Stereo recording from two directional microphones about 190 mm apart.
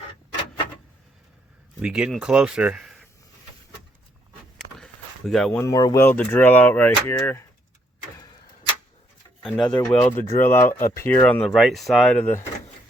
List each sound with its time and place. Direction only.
1.8 s speech: 5° right (ahead or behind)
4.8 s a sound: centre (ahead or behind)
5.6 s speech: 20° left (ahead or behind)
9.4 s speech: centre (ahead or behind)